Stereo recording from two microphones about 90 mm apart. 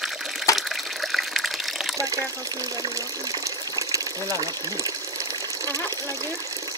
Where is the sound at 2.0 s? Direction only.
40° right (ahead or behind).